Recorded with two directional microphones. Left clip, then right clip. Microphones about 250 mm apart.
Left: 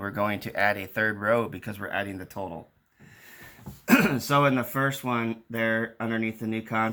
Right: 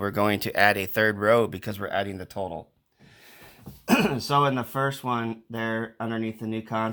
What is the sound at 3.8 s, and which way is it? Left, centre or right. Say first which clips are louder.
Speech: left 1 dB; right.